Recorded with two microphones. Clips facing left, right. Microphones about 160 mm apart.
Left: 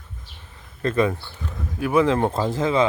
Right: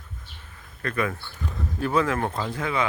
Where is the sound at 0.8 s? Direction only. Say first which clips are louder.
Left 7 dB; 25° left (ahead or behind).